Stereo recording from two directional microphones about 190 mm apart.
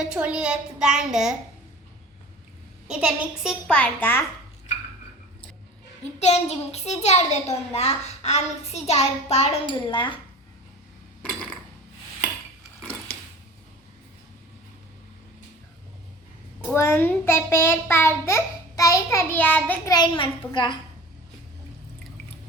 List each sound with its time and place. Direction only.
0.0 s a child's voice: 5° right (ahead or behind)
2.8 s a child's voice: 5° right (ahead or behind)
6.1 s a child's voice: 35° left (ahead or behind)
16.7 s a child's voice: 15° left (ahead or behind)